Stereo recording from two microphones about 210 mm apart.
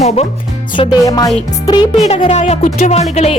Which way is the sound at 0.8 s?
20° left (ahead or behind).